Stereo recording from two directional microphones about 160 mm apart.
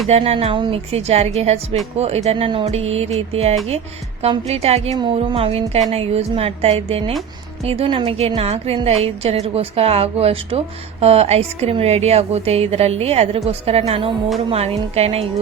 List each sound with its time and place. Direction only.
0.1 s a woman's voice: 40° right (ahead or behind)